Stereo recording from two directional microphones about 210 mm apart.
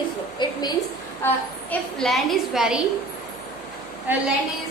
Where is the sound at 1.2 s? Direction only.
5° left (ahead or behind).